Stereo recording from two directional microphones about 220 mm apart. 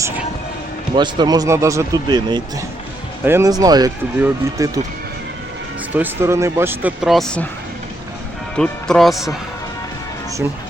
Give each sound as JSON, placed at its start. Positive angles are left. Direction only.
{"t": 0.9, "sound": "speech", "side_deg": -20}
{"t": 5.9, "sound": "speech", "side_deg": -10}
{"t": 8.5, "sound": "speech", "side_deg": 5}